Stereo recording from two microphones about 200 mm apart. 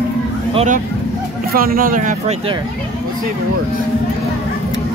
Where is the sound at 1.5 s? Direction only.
45° right (ahead or behind).